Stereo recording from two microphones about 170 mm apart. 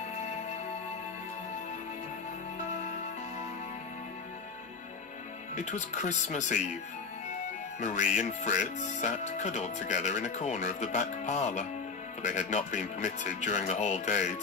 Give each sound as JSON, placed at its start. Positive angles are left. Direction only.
{"t": 5.6, "sound": "speech", "side_deg": 45}
{"t": 7.8, "sound": "speech", "side_deg": 40}